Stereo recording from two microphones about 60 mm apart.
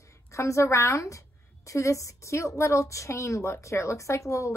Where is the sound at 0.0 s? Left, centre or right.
Left.